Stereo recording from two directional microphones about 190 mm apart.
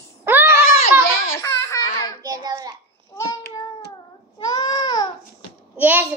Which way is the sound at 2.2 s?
20° right (ahead or behind).